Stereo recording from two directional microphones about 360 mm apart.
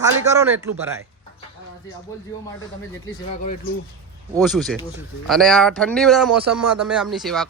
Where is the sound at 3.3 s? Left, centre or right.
Left.